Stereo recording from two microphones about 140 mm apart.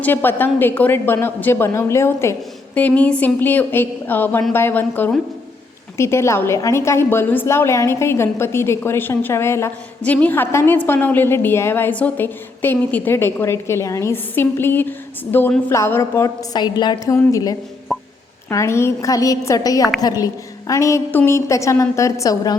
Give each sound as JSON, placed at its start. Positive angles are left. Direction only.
{"t": 0.0, "sound": "a woman's voice", "side_deg": 15}
{"t": 17.9, "sound": "a sound", "side_deg": 0}
{"t": 18.4, "sound": "a woman's voice", "side_deg": 20}